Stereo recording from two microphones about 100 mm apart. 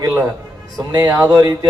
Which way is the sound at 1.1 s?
35° right (ahead or behind).